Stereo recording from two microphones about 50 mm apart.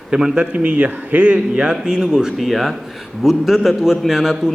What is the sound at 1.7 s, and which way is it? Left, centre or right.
A man's voice, centre.